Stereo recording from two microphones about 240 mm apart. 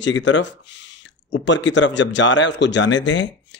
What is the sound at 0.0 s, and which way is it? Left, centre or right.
Speech, left.